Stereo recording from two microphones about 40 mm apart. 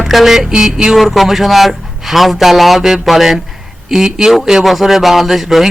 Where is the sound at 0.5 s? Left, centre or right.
Centre.